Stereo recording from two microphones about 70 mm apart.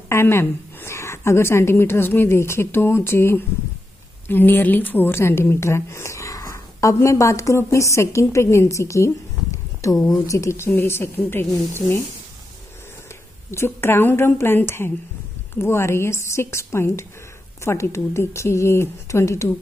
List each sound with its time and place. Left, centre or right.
0.1 s a woman's voice: left
13.5 s a woman's voice: left